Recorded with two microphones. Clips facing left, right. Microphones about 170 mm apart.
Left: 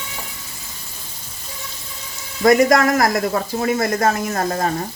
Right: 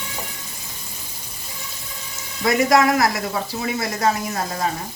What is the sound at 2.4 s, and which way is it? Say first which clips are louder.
Speech: left 3 dB; 50° left (ahead or behind).